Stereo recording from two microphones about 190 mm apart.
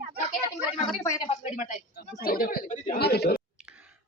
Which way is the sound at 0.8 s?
20° left (ahead or behind).